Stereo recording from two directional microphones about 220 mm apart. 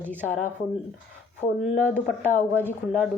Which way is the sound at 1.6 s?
5° left (ahead or behind).